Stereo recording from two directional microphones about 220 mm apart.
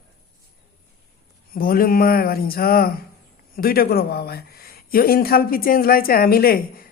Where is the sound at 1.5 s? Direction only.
40° left (ahead or behind).